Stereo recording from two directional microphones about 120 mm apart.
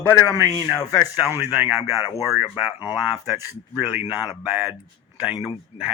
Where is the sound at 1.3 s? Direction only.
20° right (ahead or behind).